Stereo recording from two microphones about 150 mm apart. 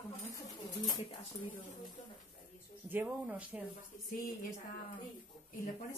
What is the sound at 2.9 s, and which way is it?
Speech, 10° right (ahead or behind).